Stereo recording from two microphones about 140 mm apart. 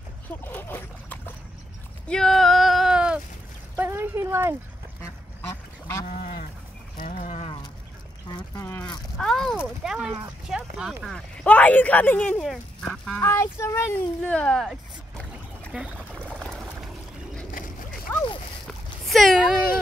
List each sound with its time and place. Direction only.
0.4 s splash: 15° left (ahead or behind)
2.0 s a sound: 5° left (ahead or behind)
3.7 s a sound: 15° right (ahead or behind)
6.0 s goat: 80° left
7.2 s speech: 45° left (ahead or behind)
9.2 s speech: 5° left (ahead or behind)
11.1 s speech: 5° left (ahead or behind)
13.2 s speech: 20° left (ahead or behind); by 15.8 s centre (ahead or behind)
15.8 s pour: centre (ahead or behind)
17.6 s a sound: 85° left
18.1 s a sound: 15° left (ahead or behind)
19.0 s a child's voice: centre (ahead or behind)